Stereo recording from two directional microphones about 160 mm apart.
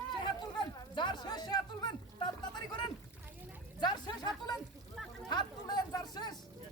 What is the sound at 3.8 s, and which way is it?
Speech, 25° left (ahead or behind).